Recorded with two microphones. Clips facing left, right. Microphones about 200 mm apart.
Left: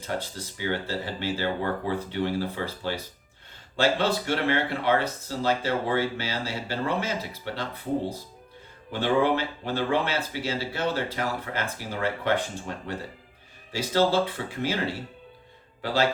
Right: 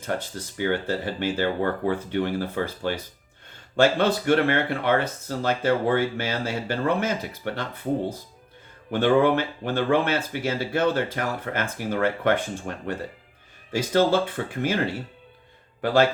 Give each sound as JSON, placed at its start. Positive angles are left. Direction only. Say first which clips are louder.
{"t": 0.0, "sound": "speech", "louder": "right 3 dB", "side_deg": -55}
{"t": 8.9, "sound": "speech", "louder": "right 4 dB", "side_deg": -55}
{"t": 15.8, "sound": "speech", "louder": "right 6 dB", "side_deg": -55}